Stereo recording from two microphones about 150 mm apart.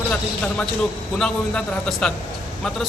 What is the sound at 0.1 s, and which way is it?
A man's voice, 5° left (ahead or behind).